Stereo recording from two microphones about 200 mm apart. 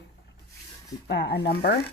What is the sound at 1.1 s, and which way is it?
Speech, 55° left (ahead or behind).